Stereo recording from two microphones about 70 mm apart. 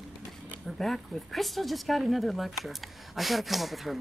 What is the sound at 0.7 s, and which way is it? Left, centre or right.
Speech, centre.